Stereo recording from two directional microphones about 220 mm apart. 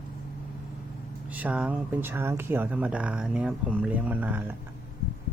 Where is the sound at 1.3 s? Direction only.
5° right (ahead or behind).